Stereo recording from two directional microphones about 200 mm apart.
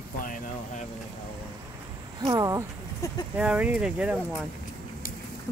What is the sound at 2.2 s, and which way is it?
Speech, 15° right (ahead or behind).